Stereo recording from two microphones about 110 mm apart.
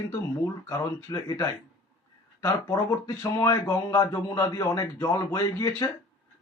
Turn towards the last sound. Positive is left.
turn(degrees=35)  # may be behind; listen again after turning